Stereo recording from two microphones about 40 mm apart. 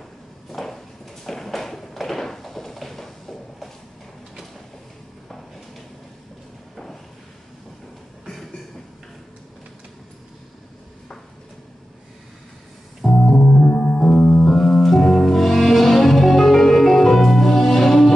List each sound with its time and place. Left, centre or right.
0.5 s a sound: centre
13.0 s organ: centre
13.6 s music: centre
14.1 s music: left
14.4 s music: centre